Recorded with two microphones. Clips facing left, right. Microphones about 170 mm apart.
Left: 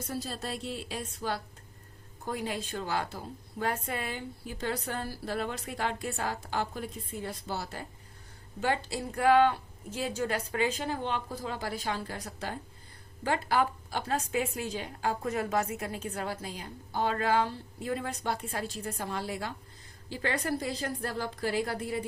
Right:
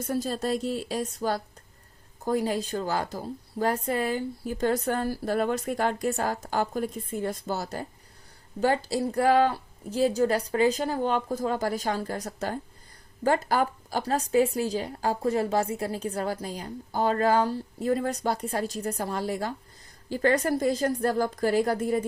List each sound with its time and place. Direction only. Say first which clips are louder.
0.1 s a woman's voice: right 9 dB; 45° right (ahead or behind)